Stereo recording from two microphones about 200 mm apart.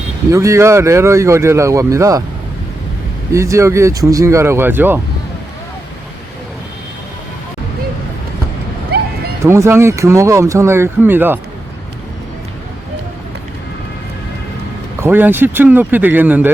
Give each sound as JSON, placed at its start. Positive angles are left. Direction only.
{"t": 0.3, "sound": "speech", "side_deg": -15}
{"t": 3.3, "sound": "speech", "side_deg": -15}
{"t": 8.9, "sound": "bow-wow", "side_deg": -50}
{"t": 9.4, "sound": "speech", "side_deg": -15}
{"t": 15.0, "sound": "speech", "side_deg": -10}